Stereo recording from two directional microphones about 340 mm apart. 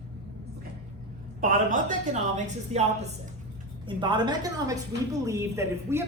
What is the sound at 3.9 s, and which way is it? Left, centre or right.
A woman's voice, centre.